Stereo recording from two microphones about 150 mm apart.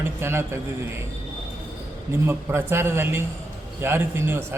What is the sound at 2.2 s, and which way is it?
A man's voice, 15° right (ahead or behind).